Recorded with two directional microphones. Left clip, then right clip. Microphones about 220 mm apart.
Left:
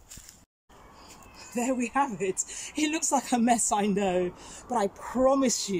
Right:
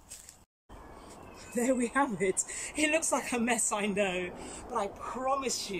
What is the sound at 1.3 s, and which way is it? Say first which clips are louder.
Speech: even; 5° left (ahead or behind).